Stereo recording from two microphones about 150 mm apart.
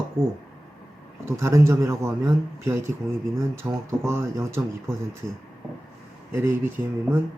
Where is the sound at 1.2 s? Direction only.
20° right (ahead or behind).